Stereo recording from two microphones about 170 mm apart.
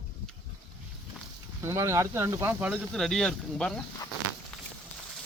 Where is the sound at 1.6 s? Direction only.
15° right (ahead or behind).